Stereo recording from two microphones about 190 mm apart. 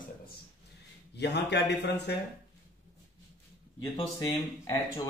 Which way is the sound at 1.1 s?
60° left (ahead or behind).